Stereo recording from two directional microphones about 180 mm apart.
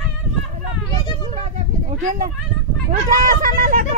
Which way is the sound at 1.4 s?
40° right (ahead or behind).